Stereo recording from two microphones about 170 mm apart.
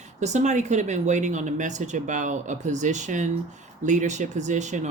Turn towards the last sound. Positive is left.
turn(degrees=-45)  # may be behind; listen again after turning